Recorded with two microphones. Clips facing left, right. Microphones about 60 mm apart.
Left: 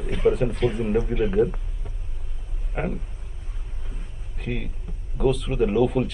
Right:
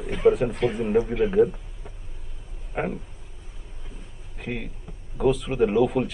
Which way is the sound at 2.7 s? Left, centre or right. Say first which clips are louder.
Right 1 dB; centre.